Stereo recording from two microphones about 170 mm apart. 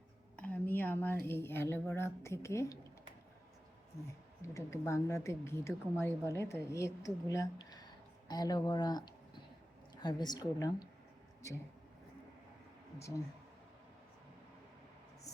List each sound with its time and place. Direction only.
0.3 s a sound: 10° left (ahead or behind)
1.9 s a woman's voice: 15° left (ahead or behind)
4.4 s a woman's voice: 15° left (ahead or behind)
13.0 s a woman's voice: 20° left (ahead or behind)